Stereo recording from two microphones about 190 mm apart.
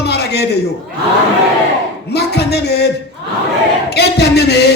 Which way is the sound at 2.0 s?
60° left (ahead or behind).